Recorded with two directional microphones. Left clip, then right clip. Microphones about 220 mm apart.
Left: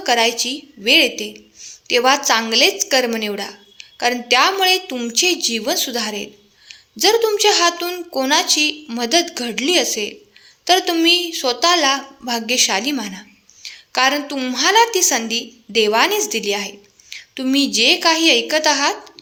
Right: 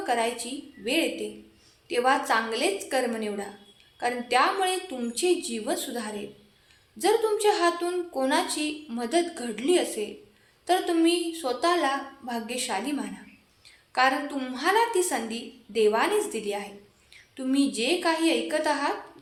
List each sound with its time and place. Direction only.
0.0 s a woman's voice: 40° left (ahead or behind)